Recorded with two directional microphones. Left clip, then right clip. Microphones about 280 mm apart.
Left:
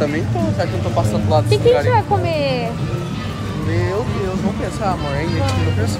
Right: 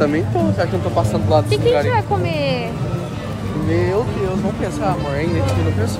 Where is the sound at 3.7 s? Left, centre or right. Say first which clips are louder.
Right 3 dB; centre.